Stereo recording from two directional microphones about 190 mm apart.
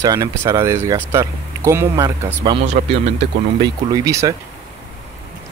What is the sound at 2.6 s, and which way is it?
Speech, 35° right (ahead or behind).